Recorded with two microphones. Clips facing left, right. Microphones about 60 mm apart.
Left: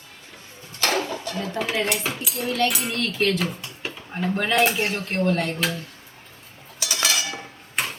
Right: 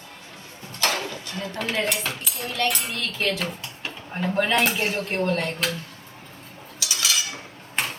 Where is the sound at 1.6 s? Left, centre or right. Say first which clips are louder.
Left 1 dB; centre.